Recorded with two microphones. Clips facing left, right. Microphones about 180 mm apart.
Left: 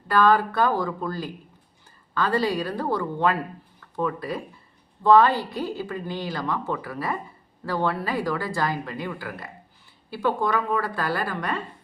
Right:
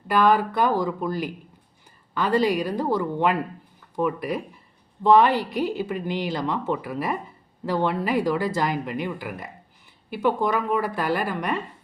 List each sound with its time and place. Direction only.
0.1 s a woman's voice: 15° right (ahead or behind)